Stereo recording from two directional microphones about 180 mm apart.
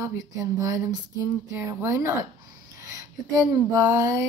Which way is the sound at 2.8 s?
20° right (ahead or behind).